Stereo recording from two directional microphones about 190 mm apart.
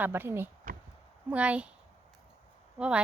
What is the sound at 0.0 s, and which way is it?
Speech, 10° right (ahead or behind).